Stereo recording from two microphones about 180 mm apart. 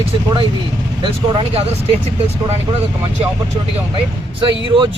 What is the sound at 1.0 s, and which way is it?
Speech, 30° right (ahead or behind).